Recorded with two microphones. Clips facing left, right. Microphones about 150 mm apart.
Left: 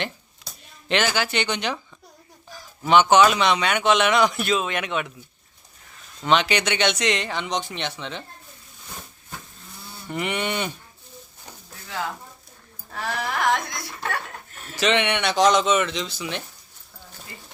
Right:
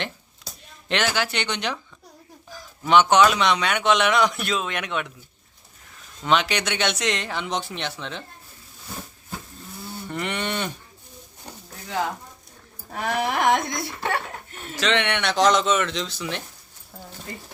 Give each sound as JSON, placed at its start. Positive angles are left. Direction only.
{"t": 0.4, "sound": "speech", "side_deg": 0}
{"t": 6.2, "sound": "speech", "side_deg": 0}
{"t": 10.1, "sound": "cattle", "side_deg": 10}
{"t": 12.9, "sound": "a sound", "side_deg": -20}
{"t": 13.7, "sound": "speech", "side_deg": 0}
{"t": 14.8, "sound": "speech", "side_deg": 10}